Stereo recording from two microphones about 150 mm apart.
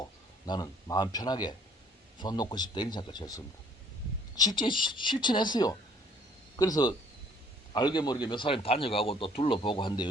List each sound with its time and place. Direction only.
0.0 s a man's voice: 25° left (ahead or behind)